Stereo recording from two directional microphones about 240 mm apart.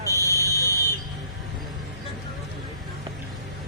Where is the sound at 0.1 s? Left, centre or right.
Centre.